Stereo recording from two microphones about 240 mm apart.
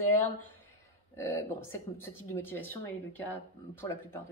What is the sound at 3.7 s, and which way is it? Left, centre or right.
Speech, centre.